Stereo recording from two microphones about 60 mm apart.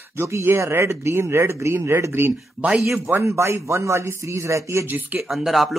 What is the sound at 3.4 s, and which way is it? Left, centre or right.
Speech, right.